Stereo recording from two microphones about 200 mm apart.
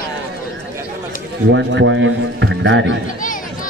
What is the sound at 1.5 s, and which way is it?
A man's voice, 65° right (ahead or behind).